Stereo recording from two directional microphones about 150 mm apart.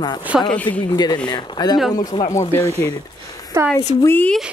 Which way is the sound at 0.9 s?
25° left (ahead or behind).